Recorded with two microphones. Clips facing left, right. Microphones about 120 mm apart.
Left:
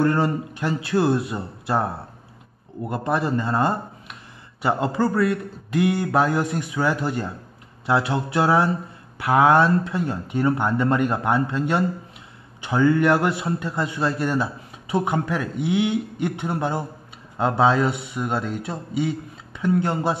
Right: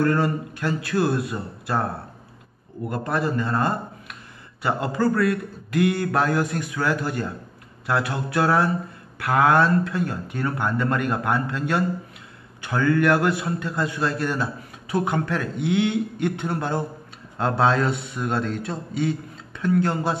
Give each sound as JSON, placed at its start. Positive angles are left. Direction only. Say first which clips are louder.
{"t": 0.0, "sound": "speech", "louder": "left 1 dB", "side_deg": 25}
{"t": 2.9, "sound": "a man's voice", "louder": "left 2 dB", "side_deg": 15}